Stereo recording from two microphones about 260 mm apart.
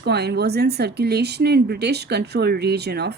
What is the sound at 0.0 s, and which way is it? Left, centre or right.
A woman's voice, right.